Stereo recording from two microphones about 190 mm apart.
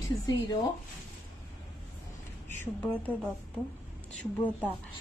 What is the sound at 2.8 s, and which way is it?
Speech, 10° left (ahead or behind).